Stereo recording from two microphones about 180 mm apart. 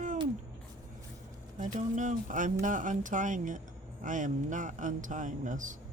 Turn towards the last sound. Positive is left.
turn(degrees=-45)  # may be behind; listen again after turning